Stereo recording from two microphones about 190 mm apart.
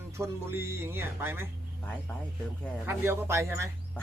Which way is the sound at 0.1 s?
15° right (ahead or behind).